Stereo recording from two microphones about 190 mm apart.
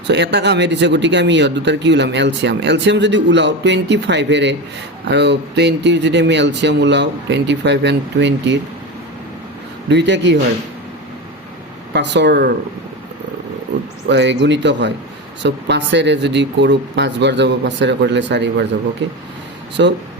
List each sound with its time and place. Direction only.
0.1 s speech: 65° right (ahead or behind)
9.9 s speech: 65° right (ahead or behind)
11.9 s speech: 65° right (ahead or behind)
14.1 s speech: 65° right (ahead or behind)
19.8 s speech: 70° right (ahead or behind)